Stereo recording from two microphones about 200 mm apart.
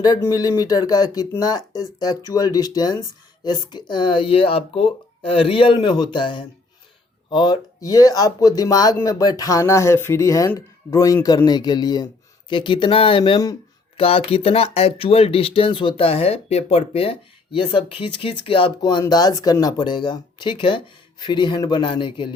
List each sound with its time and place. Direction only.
0.0 s speech: 15° left (ahead or behind)